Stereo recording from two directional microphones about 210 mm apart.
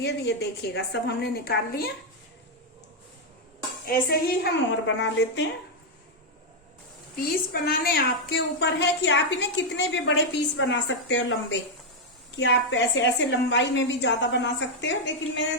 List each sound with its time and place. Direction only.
0.0 s a woman's voice: 55° left (ahead or behind)
4.1 s a woman's voice: 50° left (ahead or behind)
7.5 s a woman's voice: 45° left (ahead or behind)